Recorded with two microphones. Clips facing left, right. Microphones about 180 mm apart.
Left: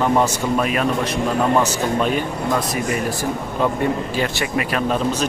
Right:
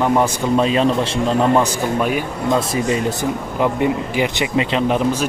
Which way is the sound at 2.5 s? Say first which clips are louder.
Right 5 dB; 25° right (ahead or behind).